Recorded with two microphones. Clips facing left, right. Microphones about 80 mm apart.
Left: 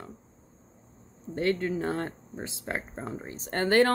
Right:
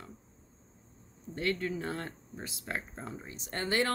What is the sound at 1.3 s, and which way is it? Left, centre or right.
Speech, left.